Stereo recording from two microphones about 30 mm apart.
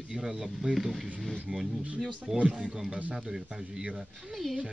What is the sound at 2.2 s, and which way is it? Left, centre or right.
Speech, right.